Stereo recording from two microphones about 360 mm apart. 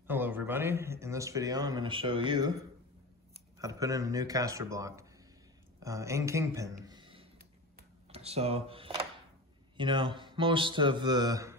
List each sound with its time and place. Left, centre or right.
0.0 s a man's voice: centre
3.5 s a man's voice: centre
6.9 s a sound: centre
9.8 s a man's voice: centre